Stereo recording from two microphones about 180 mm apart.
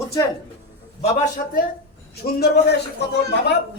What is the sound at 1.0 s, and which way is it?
Speech, 45° left (ahead or behind).